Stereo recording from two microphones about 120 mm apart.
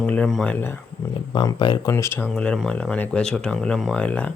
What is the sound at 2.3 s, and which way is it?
Speech, 5° left (ahead or behind).